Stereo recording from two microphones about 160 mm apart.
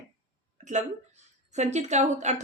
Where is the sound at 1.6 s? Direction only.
45° right (ahead or behind).